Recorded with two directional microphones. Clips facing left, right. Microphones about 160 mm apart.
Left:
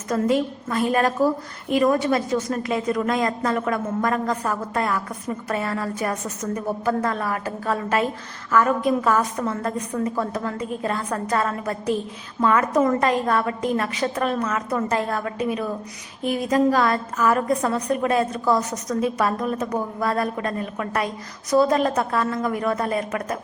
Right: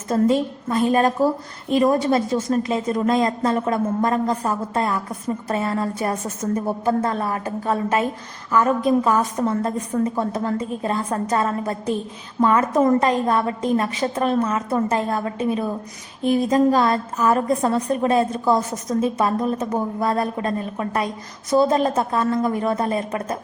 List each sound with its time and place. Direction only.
0.1 s a woman's voice: 25° right (ahead or behind)